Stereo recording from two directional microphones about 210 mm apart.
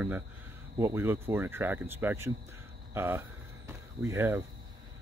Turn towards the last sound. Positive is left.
turn(degrees=-10)  # may be behind; listen again after turning